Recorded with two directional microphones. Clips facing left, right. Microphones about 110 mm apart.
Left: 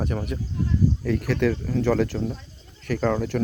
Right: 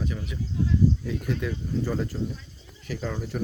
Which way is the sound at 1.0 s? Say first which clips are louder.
Left 7 dB; 75° left (ahead or behind).